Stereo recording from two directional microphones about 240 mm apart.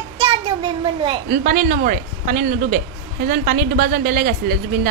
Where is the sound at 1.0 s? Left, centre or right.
Right.